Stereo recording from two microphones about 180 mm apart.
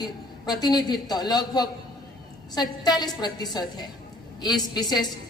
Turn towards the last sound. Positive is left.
turn(degrees=20)  # may be behind; listen again after turning